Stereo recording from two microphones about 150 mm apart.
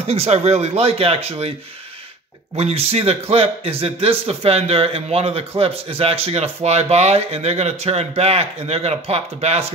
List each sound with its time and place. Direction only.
0.0 s speech: 45° right (ahead or behind)
2.5 s speech: 40° right (ahead or behind)